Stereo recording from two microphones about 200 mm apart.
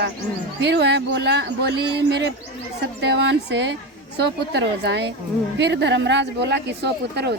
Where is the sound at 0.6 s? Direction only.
60° right (ahead or behind).